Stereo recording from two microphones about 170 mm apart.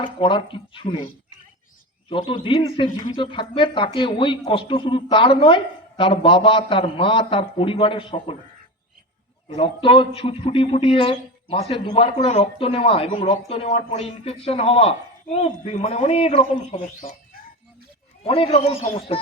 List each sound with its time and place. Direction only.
0.0 s speech: 30° left (ahead or behind)
2.0 s speech: 30° left (ahead or behind)
9.6 s speech: 30° left (ahead or behind)
18.2 s speech: 35° left (ahead or behind)